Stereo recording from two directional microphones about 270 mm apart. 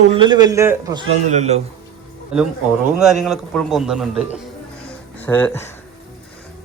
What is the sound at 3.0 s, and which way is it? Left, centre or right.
Speech, centre.